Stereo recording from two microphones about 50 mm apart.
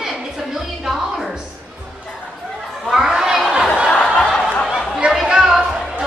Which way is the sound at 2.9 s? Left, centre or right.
Centre.